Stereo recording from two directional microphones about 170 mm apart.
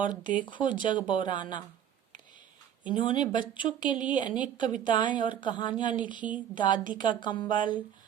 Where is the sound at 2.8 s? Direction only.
30° left (ahead or behind).